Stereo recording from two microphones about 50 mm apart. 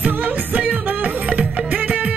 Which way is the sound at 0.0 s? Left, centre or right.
Right.